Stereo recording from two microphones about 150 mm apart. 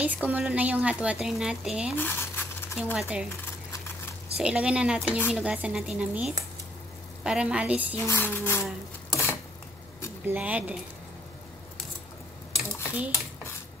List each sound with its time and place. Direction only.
0.0 s a woman's voice: 10° right (ahead or behind)
2.0 s coin: 15° left (ahead or behind)
2.7 s a woman's voice: 5° right (ahead or behind)
4.4 s a woman's voice: 5° right (ahead or behind)
8.0 s a sound: 15° left (ahead or behind)
10.2 s a woman's voice: 10° right (ahead or behind)